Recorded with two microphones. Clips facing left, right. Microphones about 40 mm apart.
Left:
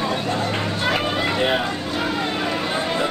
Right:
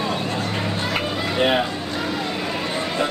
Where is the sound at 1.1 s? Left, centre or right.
Left.